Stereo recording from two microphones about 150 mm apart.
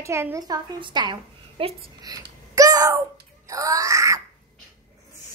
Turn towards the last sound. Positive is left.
turn(degrees=-20)  # may be behind; listen again after turning